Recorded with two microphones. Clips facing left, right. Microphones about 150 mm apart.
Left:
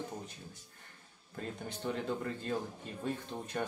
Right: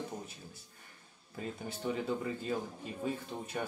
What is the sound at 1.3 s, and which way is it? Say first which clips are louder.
Speech: right 1 dB; 5° right (ahead or behind).